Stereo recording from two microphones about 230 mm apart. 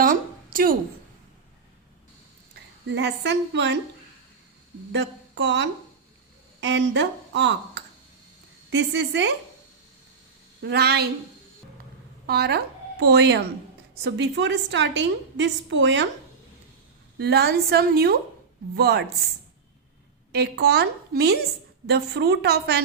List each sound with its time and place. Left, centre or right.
0.0 s a sound: right
2.9 s a woman's voice: right
4.9 s a woman's voice: right
10.6 s a woman's voice: right
12.2 s a woman's voice: right
17.2 s a woman's voice: right
20.3 s a woman's voice: right